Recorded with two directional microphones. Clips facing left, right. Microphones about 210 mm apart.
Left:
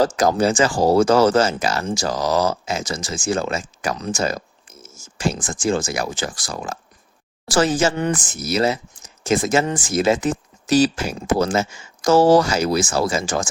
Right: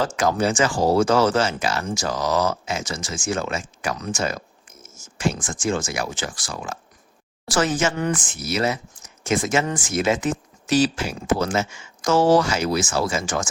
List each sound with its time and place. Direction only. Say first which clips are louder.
0.0 s speech: left 4 dB; 40° left (ahead or behind)
8.1 s speech: left 3 dB; 40° left (ahead or behind)